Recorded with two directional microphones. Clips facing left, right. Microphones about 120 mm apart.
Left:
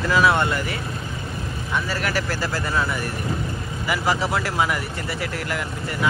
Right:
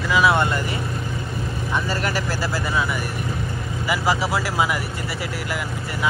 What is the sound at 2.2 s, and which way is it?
Speech, 5° right (ahead or behind).